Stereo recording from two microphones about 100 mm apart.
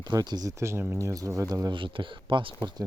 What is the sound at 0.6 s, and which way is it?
Speech, 25° right (ahead or behind).